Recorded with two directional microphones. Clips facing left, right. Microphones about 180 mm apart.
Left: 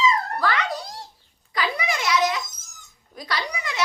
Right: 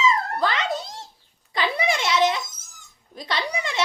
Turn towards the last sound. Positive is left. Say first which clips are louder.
# right 3 dB
turn(degrees=-25)  # may be behind; listen again after turning